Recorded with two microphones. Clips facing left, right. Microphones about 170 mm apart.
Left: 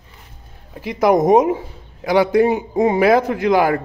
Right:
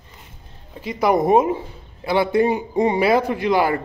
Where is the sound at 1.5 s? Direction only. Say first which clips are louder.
Even; 10° left (ahead or behind).